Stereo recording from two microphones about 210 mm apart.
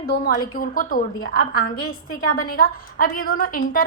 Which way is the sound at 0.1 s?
40° left (ahead or behind).